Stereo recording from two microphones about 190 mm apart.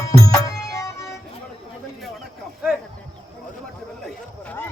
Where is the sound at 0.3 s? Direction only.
15° left (ahead or behind).